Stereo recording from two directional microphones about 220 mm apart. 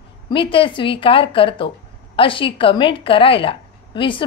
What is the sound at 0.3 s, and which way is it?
A woman's voice, 25° left (ahead or behind).